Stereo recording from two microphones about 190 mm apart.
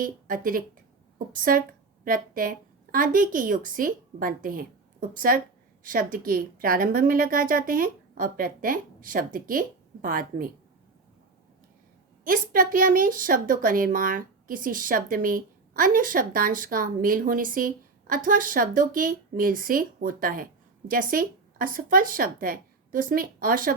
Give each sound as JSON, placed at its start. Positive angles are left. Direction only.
{"t": 0.0, "sound": "a woman's voice", "side_deg": -45}
{"t": 12.2, "sound": "a woman's voice", "side_deg": -45}